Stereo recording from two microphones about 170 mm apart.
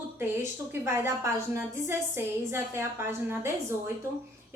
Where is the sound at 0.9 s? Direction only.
15° right (ahead or behind).